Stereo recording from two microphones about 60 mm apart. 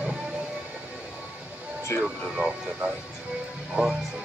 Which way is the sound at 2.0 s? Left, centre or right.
Centre.